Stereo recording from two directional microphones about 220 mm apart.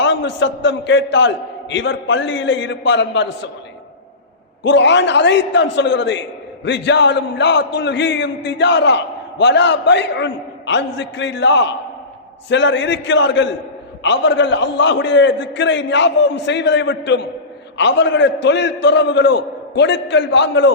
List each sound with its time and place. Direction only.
0.0 s a man's voice: 55° left (ahead or behind)
4.6 s a man's voice: 55° left (ahead or behind)